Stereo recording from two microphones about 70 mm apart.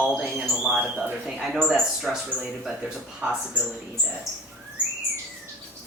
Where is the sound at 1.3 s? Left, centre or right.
Centre.